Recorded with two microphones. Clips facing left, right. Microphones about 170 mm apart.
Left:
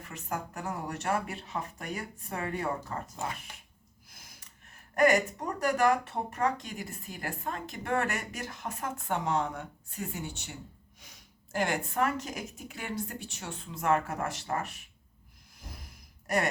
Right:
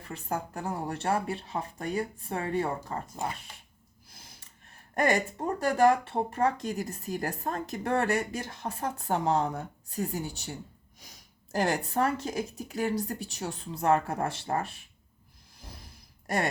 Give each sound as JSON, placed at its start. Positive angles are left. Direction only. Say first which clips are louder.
{"t": 0.0, "sound": "speech", "louder": "right 3 dB", "side_deg": -30}
{"t": 4.1, "sound": "a sound", "louder": "right 2 dB", "side_deg": -30}
{"t": 4.9, "sound": "speech", "louder": "left 2 dB", "side_deg": -30}
{"t": 11.5, "sound": "speech", "louder": "right 3 dB", "side_deg": -40}
{"t": 15.5, "sound": "sigh", "louder": "even", "side_deg": -30}